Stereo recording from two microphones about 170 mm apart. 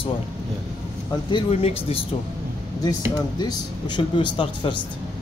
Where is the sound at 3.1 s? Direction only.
25° left (ahead or behind).